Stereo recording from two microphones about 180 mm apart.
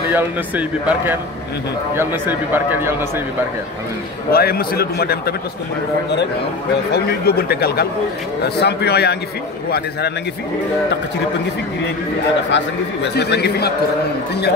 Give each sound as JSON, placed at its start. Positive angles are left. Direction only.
{"t": 0.1, "sound": "speech", "side_deg": -10}
{"t": 4.3, "sound": "a man's voice", "side_deg": 55}
{"t": 6.9, "sound": "a man's voice", "side_deg": 60}
{"t": 12.4, "sound": "a man's voice", "side_deg": 80}